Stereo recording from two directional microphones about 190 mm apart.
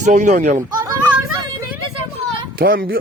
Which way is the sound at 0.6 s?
15° right (ahead or behind).